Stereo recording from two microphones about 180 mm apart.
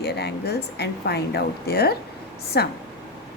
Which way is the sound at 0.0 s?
65° left (ahead or behind).